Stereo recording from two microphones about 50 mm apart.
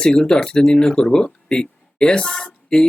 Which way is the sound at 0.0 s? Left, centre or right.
Centre.